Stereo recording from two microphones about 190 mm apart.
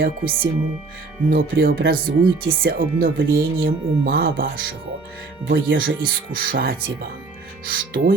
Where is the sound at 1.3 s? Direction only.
50° right (ahead or behind).